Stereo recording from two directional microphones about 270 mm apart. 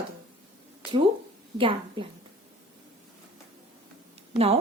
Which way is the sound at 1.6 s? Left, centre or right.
Centre.